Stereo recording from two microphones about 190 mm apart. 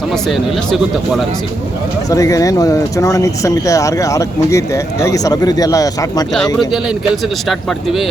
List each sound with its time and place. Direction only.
0.1 s speech: centre (ahead or behind)
2.0 s speech: 15° left (ahead or behind)
6.7 s speech: centre (ahead or behind)